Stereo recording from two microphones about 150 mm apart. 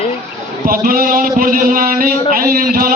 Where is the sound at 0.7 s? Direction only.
70° right (ahead or behind).